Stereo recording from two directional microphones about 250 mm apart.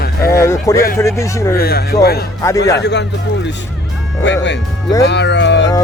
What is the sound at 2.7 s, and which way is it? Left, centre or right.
Speech, left.